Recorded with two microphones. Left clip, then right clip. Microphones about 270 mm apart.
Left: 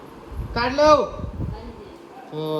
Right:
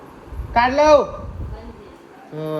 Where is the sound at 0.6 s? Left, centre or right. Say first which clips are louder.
Right 2 dB; centre.